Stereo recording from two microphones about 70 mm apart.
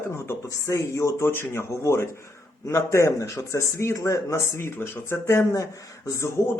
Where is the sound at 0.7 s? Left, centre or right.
Left.